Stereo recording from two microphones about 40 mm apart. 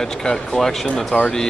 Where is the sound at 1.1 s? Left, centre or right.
Left.